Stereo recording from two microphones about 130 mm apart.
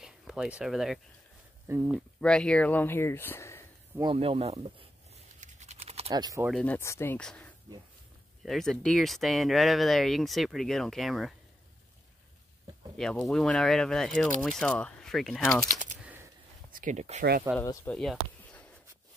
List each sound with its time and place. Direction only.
0.0 s speech: 5° right (ahead or behind)
1.7 s speech: 20° right (ahead or behind)
2.1 s speech: 5° left (ahead or behind)
4.0 s speech: 45° right (ahead or behind)
5.4 s a sound: 60° right (ahead or behind)
6.1 s speech: 30° right (ahead or behind)
6.5 s speech: 10° left (ahead or behind)
7.2 s speech: 10° left (ahead or behind)
12.9 s speech: 5° left (ahead or behind)
15.7 s typing: 90° right
16.7 s speech: 75° right (ahead or behind)
17.5 s speech: 20° right (ahead or behind)
17.8 s speech: 5° left (ahead or behind)